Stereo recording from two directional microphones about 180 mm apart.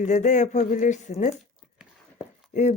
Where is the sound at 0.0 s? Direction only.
40° left (ahead or behind).